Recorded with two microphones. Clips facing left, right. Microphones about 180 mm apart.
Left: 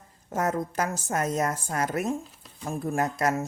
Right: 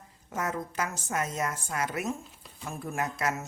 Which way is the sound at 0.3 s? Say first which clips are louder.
Left 6 dB; 40° left (ahead or behind).